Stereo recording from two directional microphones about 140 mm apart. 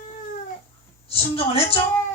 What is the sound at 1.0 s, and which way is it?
Speech, 45° left (ahead or behind).